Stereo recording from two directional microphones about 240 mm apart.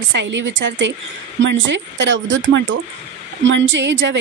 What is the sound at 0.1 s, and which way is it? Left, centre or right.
A woman's voice, right.